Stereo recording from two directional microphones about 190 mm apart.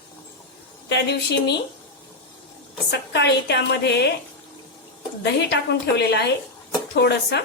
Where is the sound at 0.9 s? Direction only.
60° left (ahead or behind).